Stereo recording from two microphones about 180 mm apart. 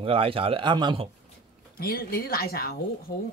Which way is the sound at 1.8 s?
55° left (ahead or behind).